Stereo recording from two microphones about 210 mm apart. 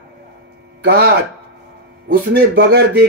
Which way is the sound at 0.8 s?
50° right (ahead or behind).